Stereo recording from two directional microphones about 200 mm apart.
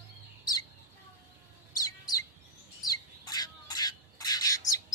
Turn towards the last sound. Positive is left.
turn(degrees=15)  # may be behind; listen again after turning